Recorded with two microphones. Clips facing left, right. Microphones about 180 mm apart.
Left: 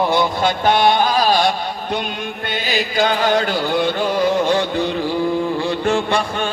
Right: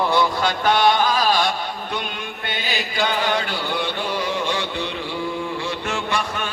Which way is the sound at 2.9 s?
45° left (ahead or behind).